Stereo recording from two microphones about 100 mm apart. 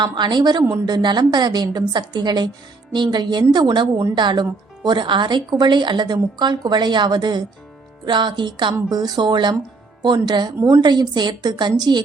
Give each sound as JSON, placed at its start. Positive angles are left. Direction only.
{"t": 0.0, "sound": "speech", "side_deg": -50}